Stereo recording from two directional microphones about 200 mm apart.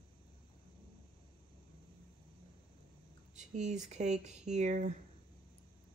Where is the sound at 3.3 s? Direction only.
35° right (ahead or behind).